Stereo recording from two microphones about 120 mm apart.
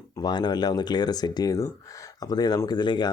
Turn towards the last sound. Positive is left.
turn(degrees=40)  # may be behind; listen again after turning